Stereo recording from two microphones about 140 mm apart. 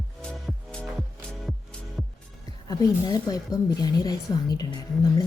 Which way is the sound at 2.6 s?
25° left (ahead or behind).